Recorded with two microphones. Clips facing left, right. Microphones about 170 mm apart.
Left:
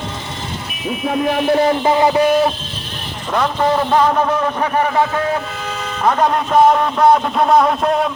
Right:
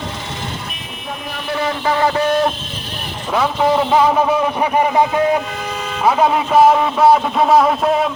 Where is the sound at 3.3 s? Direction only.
5° right (ahead or behind).